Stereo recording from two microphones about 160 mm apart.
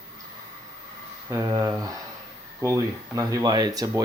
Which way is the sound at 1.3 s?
20° right (ahead or behind).